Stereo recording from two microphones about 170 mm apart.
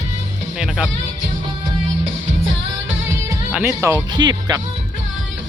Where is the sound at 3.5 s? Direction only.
10° right (ahead or behind).